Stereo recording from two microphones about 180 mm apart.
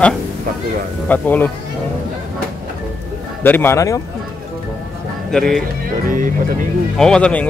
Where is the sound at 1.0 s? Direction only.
10° left (ahead or behind).